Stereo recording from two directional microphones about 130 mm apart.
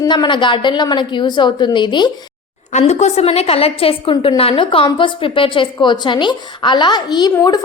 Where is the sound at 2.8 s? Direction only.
55° left (ahead or behind).